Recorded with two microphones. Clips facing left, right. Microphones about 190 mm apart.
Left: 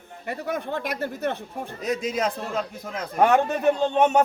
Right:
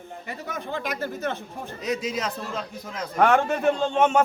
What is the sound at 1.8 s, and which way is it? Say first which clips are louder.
Speech: left 2 dB; 50° left (ahead or behind).